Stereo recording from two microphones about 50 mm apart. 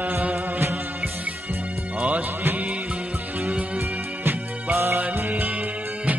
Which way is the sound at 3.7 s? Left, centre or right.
Right.